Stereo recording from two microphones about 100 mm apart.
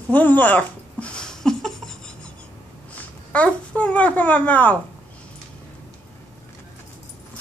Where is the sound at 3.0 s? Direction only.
15° left (ahead or behind).